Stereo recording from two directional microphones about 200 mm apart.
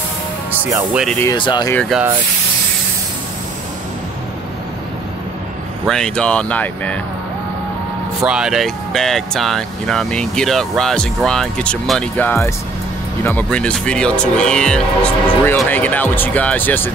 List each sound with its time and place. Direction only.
0.5 s speech: 15° right (ahead or behind)
0.9 s speech: centre (ahead or behind)
1.2 s speech: 20° left (ahead or behind)
1.8 s speech: 5° right (ahead or behind)
5.9 s speech: 5° left (ahead or behind)
8.2 s speech: 5° right (ahead or behind)